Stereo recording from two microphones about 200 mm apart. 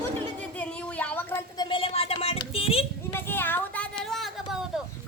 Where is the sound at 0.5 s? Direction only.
5° left (ahead or behind).